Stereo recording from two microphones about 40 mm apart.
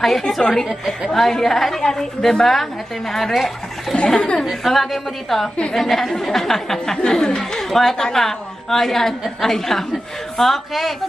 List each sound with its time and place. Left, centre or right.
0.4 s a woman's voice: centre
3.9 s speech: left
4.5 s a woman's voice: centre